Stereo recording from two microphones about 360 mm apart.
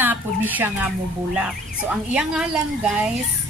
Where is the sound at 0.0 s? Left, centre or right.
Centre.